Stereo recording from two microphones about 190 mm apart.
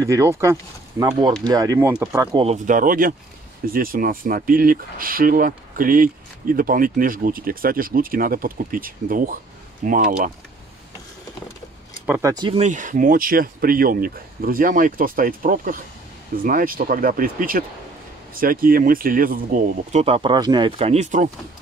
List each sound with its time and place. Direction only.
0.0 s speech: 15° right (ahead or behind)
2.3 s speech: 35° right (ahead or behind)
12.1 s speech: 15° right (ahead or behind)
12.5 s speech: 40° right (ahead or behind)